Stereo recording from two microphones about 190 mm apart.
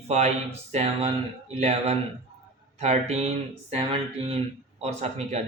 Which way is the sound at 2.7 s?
35° right (ahead or behind).